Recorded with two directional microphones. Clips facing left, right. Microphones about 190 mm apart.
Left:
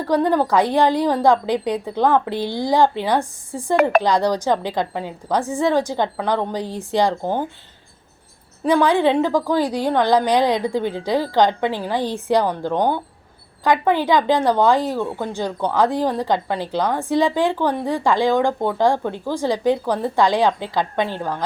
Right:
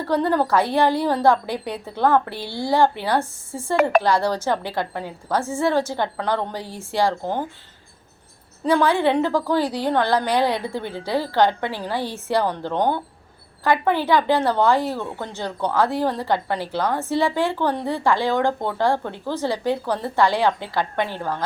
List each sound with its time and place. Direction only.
0.0 s a woman's voice: 15° left (ahead or behind)
8.6 s a woman's voice: 15° left (ahead or behind)